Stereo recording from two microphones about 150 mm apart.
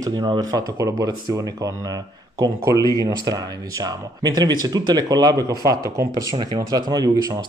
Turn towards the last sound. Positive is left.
turn(degrees=-25)  # may be behind; listen again after turning